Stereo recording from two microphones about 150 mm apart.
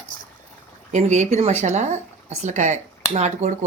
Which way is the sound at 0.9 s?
50° right (ahead or behind).